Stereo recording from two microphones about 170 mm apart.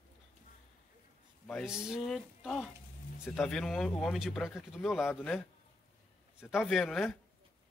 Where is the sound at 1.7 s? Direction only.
5° right (ahead or behind).